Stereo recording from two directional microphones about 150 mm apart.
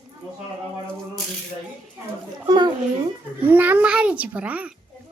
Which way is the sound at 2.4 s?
30° right (ahead or behind).